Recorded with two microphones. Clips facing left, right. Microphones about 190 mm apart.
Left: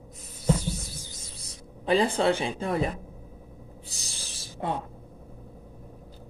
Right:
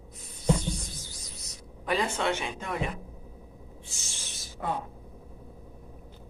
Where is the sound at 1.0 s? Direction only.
30° left (ahead or behind).